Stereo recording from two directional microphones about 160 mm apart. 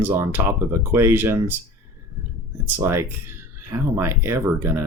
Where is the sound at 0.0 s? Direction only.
15° right (ahead or behind).